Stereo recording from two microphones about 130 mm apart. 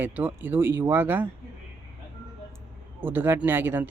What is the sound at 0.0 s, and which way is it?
Speech, 15° right (ahead or behind).